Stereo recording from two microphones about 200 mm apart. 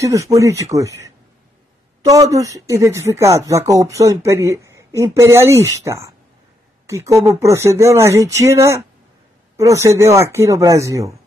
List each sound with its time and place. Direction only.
0.0 s speech: 15° right (ahead or behind)